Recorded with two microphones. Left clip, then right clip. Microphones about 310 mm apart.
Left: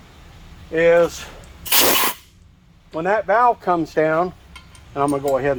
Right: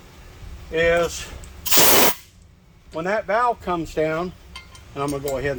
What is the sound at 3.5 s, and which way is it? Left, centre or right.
Speech, left.